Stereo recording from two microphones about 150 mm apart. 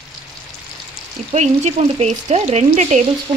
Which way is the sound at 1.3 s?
50° right (ahead or behind).